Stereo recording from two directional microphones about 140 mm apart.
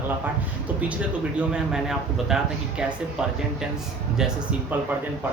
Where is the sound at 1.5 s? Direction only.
5° right (ahead or behind).